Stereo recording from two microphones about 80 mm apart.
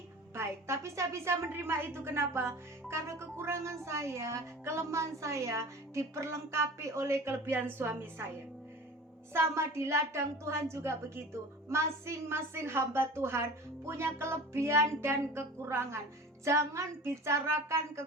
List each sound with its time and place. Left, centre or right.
0.3 s a woman's voice: right
9.3 s a woman's voice: right